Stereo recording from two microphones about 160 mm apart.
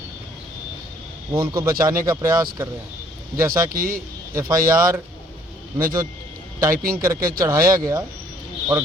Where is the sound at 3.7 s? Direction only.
60° right (ahead or behind).